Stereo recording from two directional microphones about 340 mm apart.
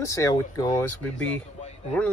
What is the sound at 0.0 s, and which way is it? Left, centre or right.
Speech, centre.